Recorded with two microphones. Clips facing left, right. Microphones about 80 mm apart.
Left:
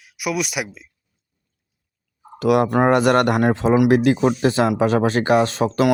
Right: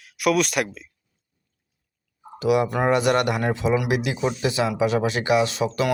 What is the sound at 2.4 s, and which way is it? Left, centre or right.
Speech, left.